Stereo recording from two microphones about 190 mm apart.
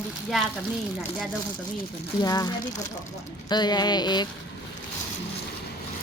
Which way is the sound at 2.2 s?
20° left (ahead or behind).